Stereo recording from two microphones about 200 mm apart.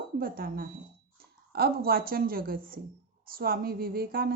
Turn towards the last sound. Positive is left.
turn(degrees=-45)  # may be behind; listen again after turning